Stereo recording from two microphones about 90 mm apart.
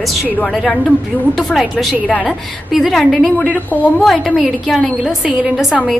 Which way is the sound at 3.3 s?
15° left (ahead or behind).